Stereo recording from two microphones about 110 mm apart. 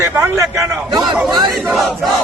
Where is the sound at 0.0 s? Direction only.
20° right (ahead or behind).